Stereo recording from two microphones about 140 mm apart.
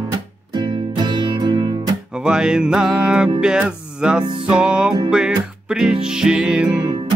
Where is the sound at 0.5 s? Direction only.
35° right (ahead or behind).